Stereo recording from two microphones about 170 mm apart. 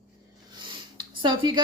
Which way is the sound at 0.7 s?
25° right (ahead or behind).